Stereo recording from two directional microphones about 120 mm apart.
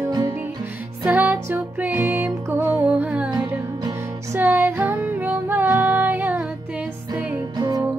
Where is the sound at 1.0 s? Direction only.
15° right (ahead or behind).